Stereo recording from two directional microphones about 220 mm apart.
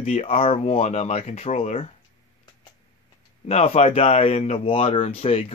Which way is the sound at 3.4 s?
30° left (ahead or behind).